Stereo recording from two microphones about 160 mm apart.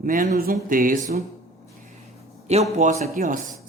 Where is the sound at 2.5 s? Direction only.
40° right (ahead or behind).